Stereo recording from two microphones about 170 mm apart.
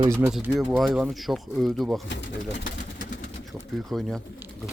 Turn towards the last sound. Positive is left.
turn(degrees=0)  # may be behind; listen again after turning